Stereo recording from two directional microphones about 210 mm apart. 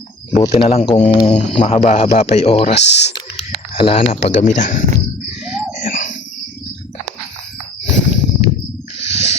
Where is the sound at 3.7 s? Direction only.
25° left (ahead or behind).